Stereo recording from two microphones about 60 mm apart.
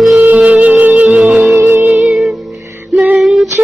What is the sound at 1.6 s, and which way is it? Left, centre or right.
Music, right.